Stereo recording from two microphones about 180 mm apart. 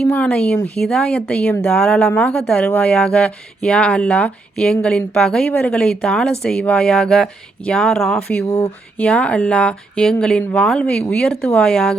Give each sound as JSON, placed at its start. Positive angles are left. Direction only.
{"t": 0.0, "sound": "speech", "side_deg": 5}
{"t": 8.4, "sound": "speech", "side_deg": 20}
{"t": 9.0, "sound": "speech", "side_deg": 5}